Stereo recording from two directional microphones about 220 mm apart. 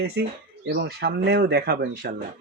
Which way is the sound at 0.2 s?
50° right (ahead or behind).